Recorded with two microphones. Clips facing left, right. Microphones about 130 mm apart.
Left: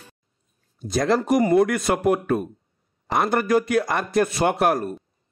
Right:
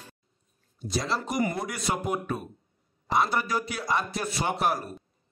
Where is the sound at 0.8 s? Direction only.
50° left (ahead or behind).